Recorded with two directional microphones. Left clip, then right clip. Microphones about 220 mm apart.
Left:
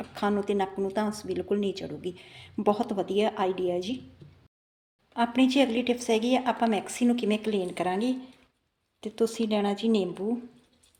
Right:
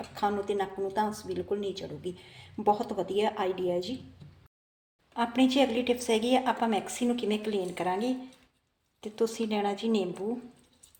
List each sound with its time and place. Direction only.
0.1 s a woman's voice: 30° left (ahead or behind)
5.1 s a woman's voice: 20° left (ahead or behind)